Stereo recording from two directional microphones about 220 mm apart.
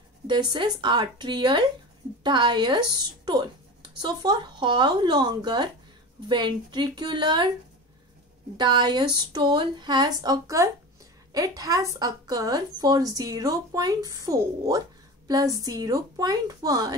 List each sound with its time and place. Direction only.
0.3 s speech: 20° right (ahead or behind)
8.5 s a woman's voice: 20° right (ahead or behind)